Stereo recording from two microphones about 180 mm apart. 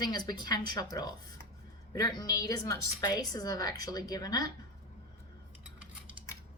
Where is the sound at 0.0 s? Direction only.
20° left (ahead or behind).